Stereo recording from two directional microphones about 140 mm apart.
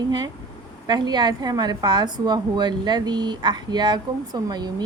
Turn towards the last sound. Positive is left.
turn(degrees=-30)  # may be behind; listen again after turning